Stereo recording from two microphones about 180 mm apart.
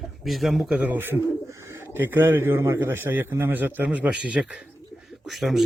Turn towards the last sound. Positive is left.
turn(degrees=0)  # may be behind; listen again after turning